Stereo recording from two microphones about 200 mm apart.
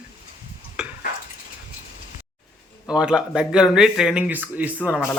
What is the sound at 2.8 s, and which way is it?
Speech, 5° right (ahead or behind).